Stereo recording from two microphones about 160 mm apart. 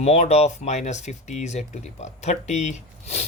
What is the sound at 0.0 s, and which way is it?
Speech, 40° left (ahead or behind).